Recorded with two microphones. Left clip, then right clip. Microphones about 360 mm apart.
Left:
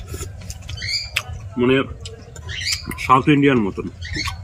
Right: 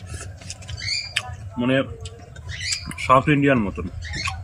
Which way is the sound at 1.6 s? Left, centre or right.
Centre.